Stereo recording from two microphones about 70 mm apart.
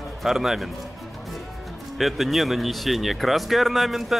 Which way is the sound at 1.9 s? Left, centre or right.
Centre.